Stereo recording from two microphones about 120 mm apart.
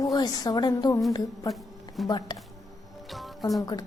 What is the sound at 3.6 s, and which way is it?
Speech, 30° left (ahead or behind).